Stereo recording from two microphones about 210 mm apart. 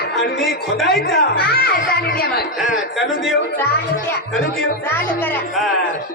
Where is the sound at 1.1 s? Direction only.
45° left (ahead or behind).